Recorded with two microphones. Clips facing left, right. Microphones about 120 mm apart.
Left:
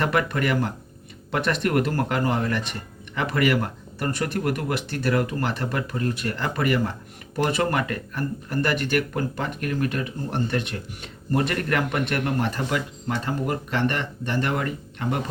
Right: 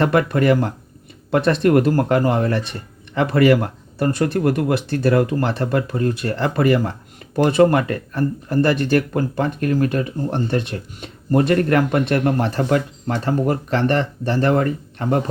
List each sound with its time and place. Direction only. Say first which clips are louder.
0.0 s speech: right 7 dB; 25° right (ahead or behind)